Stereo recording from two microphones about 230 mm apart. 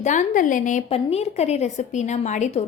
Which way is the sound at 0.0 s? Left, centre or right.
Left.